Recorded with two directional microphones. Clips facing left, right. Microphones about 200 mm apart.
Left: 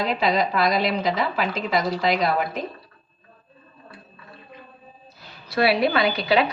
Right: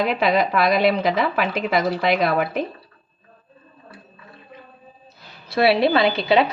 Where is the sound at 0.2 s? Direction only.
60° right (ahead or behind).